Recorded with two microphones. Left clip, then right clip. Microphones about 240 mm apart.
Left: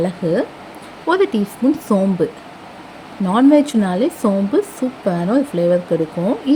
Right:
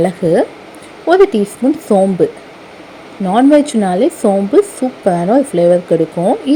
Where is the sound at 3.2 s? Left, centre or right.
Centre.